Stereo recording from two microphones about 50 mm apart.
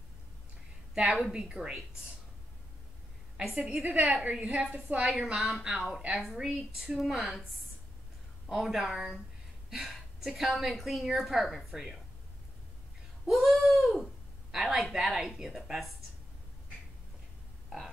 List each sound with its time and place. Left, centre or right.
0.9 s a woman's voice: centre
3.6 s a woman's voice: centre
4.2 s a woman's voice: right
5.2 s a woman's voice: centre
7.2 s a sound: centre
9.7 s a woman's voice: centre
11.1 s a sound: centre
13.2 s a sound: centre
15.3 s a woman's voice: centre